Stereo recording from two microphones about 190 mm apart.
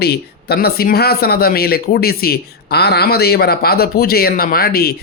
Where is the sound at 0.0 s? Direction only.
60° left (ahead or behind).